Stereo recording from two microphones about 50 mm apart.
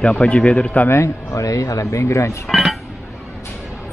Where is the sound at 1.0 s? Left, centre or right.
Left.